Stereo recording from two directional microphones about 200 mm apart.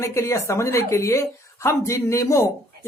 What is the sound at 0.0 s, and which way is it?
Speech, 15° left (ahead or behind).